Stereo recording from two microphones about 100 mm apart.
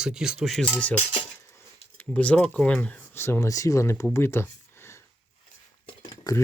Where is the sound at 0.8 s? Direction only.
15° left (ahead or behind).